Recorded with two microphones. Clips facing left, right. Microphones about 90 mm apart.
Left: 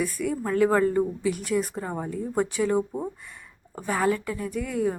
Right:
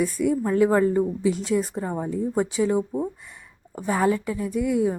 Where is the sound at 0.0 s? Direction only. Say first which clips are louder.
Right 5 dB; 20° right (ahead or behind).